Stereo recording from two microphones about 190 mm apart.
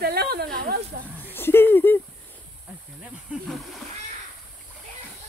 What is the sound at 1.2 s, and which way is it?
Speech, 10° left (ahead or behind).